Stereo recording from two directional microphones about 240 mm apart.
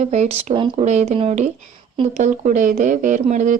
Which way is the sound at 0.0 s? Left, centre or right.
Right.